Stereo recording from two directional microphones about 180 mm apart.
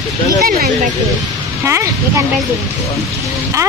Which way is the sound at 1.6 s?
15° right (ahead or behind).